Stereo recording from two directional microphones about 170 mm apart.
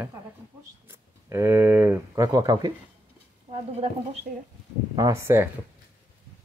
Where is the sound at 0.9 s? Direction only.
15° right (ahead or behind).